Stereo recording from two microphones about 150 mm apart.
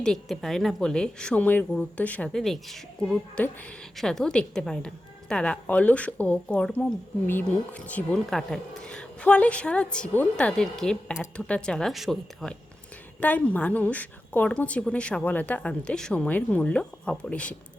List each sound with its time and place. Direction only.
0.0 s a woman's voice: 5° left (ahead or behind)